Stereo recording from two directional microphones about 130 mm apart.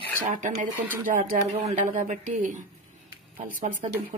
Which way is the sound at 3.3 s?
90° right.